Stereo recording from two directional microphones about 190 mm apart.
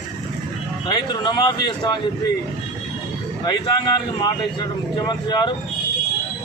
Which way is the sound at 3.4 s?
20° left (ahead or behind).